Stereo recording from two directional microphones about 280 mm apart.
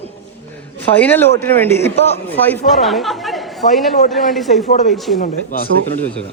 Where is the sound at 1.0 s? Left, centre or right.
Centre.